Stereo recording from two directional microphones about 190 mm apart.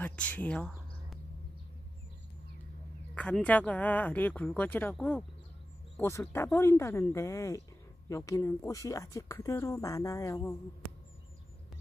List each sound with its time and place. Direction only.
0.0 s speech: 5° left (ahead or behind)
3.2 s speech: 5° left (ahead or behind)